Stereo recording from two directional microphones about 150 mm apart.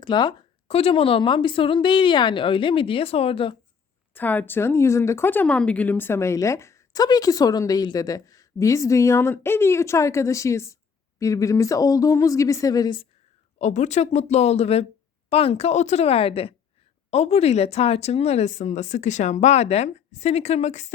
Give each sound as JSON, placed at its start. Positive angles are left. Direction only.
{"t": 0.0, "sound": "a woman's voice", "side_deg": 30}
{"t": 4.1, "sound": "speech", "side_deg": 10}
{"t": 13.6, "sound": "a woman's voice", "side_deg": 50}